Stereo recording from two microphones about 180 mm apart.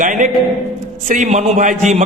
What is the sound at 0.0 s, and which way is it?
A man's voice, 45° right (ahead or behind).